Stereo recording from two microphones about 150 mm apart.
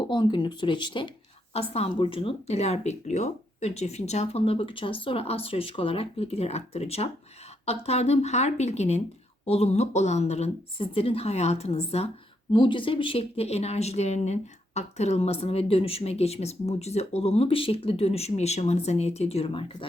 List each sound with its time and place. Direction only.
0.0 s speech: 30° left (ahead or behind)
1.5 s speech: 45° left (ahead or behind)